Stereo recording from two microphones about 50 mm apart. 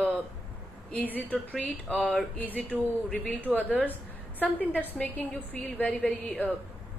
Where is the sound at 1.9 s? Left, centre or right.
Centre.